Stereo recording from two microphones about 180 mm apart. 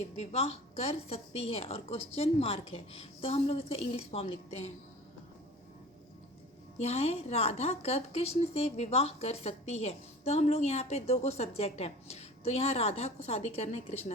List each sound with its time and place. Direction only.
0.2 s a woman's voice: 35° left (ahead or behind)
6.8 s a woman's voice: 35° left (ahead or behind)